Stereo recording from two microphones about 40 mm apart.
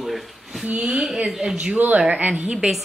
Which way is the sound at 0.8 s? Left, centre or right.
Centre.